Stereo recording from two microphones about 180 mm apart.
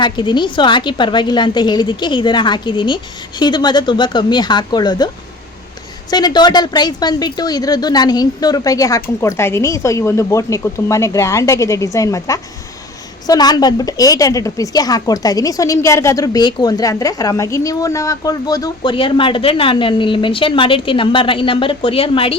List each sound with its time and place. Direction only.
0.0 s speech: 25° left (ahead or behind)
6.1 s speech: 20° left (ahead or behind)